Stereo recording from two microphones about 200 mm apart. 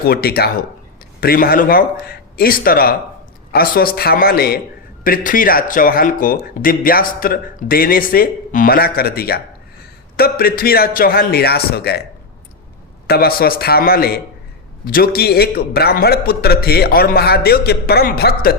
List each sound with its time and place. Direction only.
0.0 s speech: 50° left (ahead or behind)
13.1 s speech: 50° left (ahead or behind)